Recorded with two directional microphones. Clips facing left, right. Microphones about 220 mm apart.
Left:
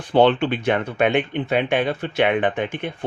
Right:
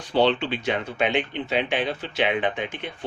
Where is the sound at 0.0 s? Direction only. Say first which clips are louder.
Left 5 dB; 55° left (ahead or behind).